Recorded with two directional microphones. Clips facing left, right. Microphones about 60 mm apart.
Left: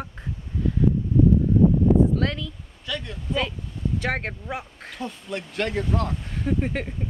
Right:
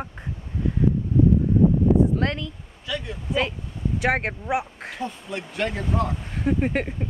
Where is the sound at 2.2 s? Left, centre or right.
Right.